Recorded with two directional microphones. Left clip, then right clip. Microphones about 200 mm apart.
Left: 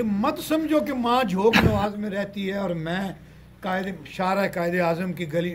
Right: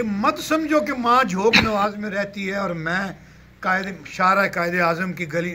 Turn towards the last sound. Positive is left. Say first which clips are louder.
# right 2 dB
turn(degrees=10)  # may be behind; listen again after turning